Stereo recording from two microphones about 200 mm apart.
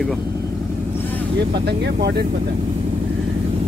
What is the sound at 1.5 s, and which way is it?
Speech, 55° right (ahead or behind).